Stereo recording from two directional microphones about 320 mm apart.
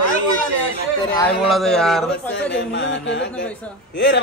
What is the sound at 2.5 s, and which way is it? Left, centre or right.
Music, left.